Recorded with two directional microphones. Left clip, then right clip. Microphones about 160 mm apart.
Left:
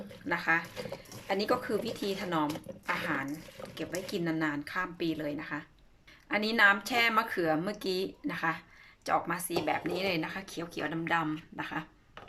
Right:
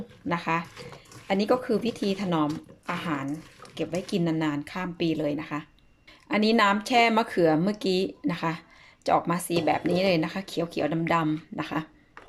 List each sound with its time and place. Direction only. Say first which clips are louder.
0.3 s speech: right 2 dB; 20° right (ahead or behind)